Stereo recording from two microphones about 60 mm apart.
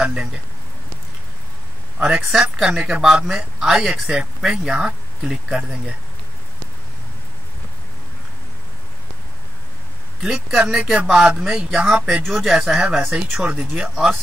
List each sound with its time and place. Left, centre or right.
0.0 s speech: centre
2.1 s speech: centre
10.2 s speech: centre